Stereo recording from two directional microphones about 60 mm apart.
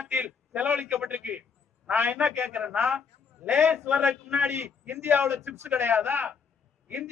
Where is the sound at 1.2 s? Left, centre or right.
Right.